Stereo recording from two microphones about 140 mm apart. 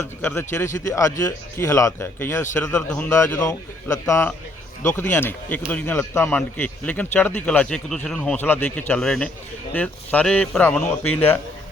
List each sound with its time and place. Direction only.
0.2 s speech: 15° left (ahead or behind)
3.1 s speech: 20° left (ahead or behind)